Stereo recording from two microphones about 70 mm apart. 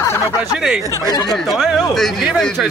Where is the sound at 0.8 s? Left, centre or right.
Right.